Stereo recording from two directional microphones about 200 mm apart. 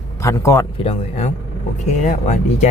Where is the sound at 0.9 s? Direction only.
35° left (ahead or behind).